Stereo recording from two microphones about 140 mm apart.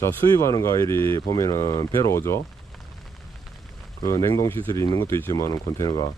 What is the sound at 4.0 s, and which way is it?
Speech, 25° left (ahead or behind).